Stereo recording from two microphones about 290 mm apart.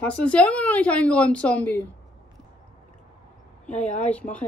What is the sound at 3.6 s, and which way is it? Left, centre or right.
Speech, centre.